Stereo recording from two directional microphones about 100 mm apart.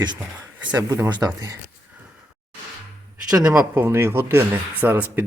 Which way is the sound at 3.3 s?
10° right (ahead or behind).